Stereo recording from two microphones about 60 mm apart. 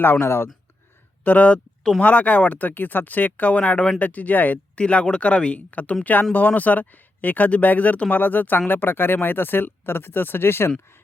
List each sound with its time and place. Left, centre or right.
0.0 s speech: left
1.2 s speech: left